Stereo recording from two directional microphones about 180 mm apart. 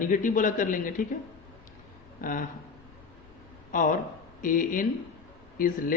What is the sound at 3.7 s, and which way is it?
A man's voice, 45° left (ahead or behind).